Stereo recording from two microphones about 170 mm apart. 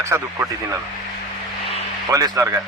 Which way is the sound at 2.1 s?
20° right (ahead or behind).